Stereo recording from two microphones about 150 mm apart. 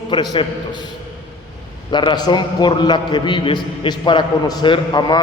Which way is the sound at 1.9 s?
30° left (ahead or behind).